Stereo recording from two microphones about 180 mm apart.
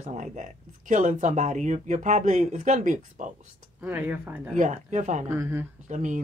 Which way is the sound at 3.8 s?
10° right (ahead or behind).